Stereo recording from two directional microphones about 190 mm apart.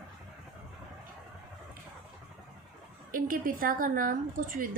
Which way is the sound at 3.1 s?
45° right (ahead or behind).